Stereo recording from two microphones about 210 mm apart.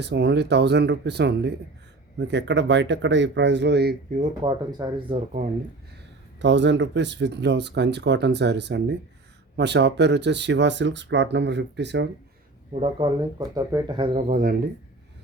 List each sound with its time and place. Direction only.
0.0 s speech: 55° right (ahead or behind)
4.4 s speech: 20° right (ahead or behind)
6.4 s speech: 60° right (ahead or behind)
12.7 s speech: 25° right (ahead or behind)